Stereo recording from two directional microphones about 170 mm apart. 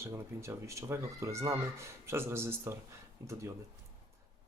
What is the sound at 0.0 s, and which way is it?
Speech, 15° right (ahead or behind).